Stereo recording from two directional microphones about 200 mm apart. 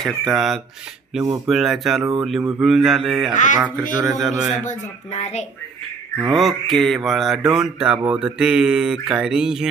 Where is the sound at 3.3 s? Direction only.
40° left (ahead or behind).